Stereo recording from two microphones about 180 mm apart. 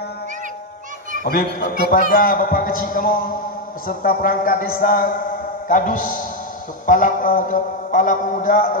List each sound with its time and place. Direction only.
1.2 s a man's voice: 55° left (ahead or behind)